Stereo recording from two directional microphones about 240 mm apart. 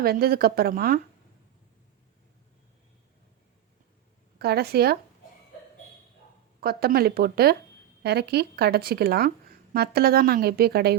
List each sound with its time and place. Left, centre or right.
0.0 s a woman's voice: right
4.4 s a woman's voice: right
6.6 s a woman's voice: right